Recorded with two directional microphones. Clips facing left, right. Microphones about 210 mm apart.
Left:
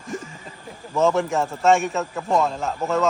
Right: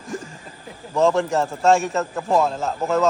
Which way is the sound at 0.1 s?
Centre (ahead or behind).